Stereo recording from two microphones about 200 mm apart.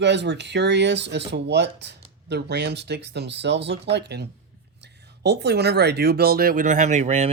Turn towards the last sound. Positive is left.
turn(degrees=-30)  # may be behind; listen again after turning